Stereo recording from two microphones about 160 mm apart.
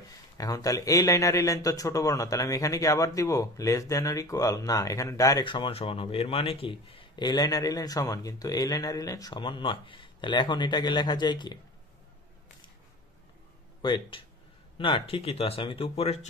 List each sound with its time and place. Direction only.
0.4 s speech: 20° left (ahead or behind)
13.8 s speech: 30° left (ahead or behind)